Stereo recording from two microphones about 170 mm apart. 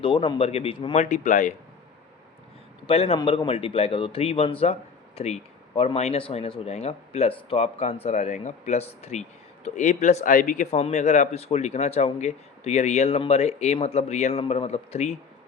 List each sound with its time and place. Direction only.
0.0 s a man's voice: 30° left (ahead or behind)
1.1 s speech: 45° left (ahead or behind)
2.8 s a man's voice: 35° left (ahead or behind)